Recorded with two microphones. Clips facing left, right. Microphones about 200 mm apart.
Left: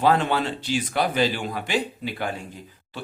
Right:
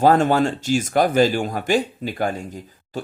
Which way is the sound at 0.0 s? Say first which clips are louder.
Right 5 dB; 45° right (ahead or behind).